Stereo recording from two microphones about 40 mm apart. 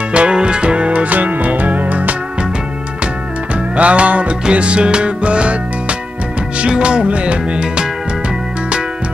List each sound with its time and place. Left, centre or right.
0.1 s music: right
3.7 s music: right